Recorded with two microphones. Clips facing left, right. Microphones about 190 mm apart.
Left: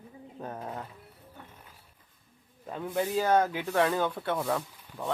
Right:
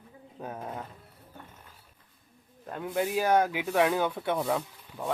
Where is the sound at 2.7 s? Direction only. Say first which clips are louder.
Right 1 dB; centre (ahead or behind).